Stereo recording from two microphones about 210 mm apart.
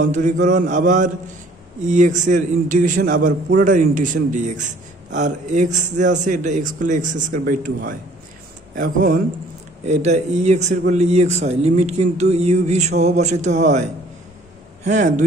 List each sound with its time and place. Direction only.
0.1 s a man's voice: 35° right (ahead or behind)
14.9 s a man's voice: 35° right (ahead or behind)